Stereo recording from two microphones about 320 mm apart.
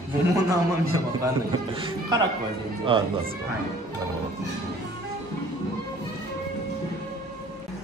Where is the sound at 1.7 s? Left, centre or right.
Centre.